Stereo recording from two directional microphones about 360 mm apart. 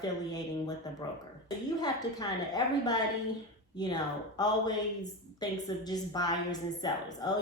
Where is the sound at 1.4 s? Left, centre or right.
Centre.